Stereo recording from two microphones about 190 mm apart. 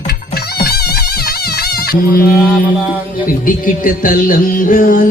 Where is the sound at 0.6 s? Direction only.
55° left (ahead or behind).